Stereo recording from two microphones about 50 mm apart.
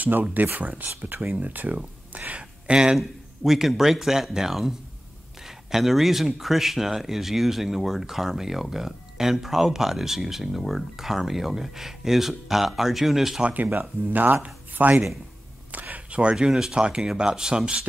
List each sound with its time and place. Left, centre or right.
0.0 s speech: right; by 13.4 s centre
13.4 s speech: right
15.7 s a sound: right
16.2 s speech: centre